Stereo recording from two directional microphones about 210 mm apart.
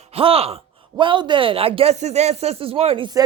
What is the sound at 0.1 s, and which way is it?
Speech, 25° right (ahead or behind).